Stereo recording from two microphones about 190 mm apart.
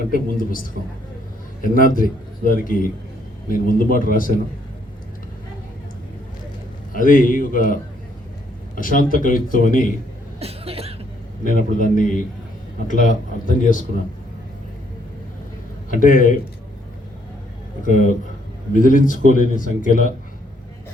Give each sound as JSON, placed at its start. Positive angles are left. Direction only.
{"t": 0.1, "sound": "a man's voice", "side_deg": 45}
{"t": 1.6, "sound": "a man's voice", "side_deg": 45}
{"t": 6.9, "sound": "a man's voice", "side_deg": 45}
{"t": 10.4, "sound": "cough", "side_deg": -30}
{"t": 11.4, "sound": "a man's voice", "side_deg": 45}
{"t": 15.9, "sound": "a man's voice", "side_deg": 45}
{"t": 17.8, "sound": "a man's voice", "side_deg": 40}